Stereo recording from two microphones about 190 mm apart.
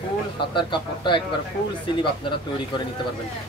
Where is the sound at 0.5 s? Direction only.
25° left (ahead or behind).